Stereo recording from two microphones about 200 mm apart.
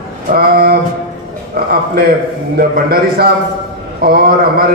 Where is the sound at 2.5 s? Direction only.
50° right (ahead or behind).